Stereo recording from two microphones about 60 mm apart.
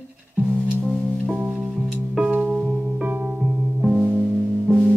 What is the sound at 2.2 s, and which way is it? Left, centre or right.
Music, right.